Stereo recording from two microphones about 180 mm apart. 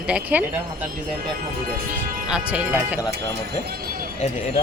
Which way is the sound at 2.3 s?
5° right (ahead or behind).